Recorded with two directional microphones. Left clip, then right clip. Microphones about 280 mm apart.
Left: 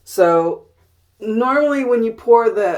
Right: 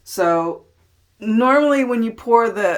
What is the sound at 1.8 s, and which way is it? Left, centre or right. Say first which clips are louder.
Speech: left 4 dB; right.